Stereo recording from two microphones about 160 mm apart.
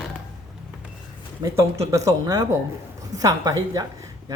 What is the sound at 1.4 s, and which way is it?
Speech, 20° right (ahead or behind).